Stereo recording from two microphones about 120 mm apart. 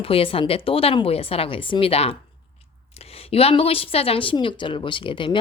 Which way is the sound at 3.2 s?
50° left (ahead or behind).